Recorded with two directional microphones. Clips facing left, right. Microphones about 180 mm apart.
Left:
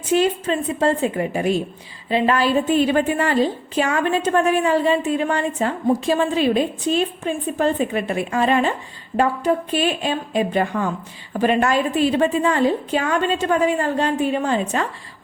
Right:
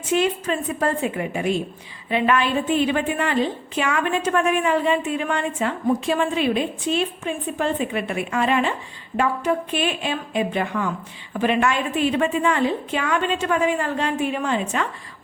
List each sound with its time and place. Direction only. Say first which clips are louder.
0.1 s a woman's voice: left 3 dB; 35° left (ahead or behind)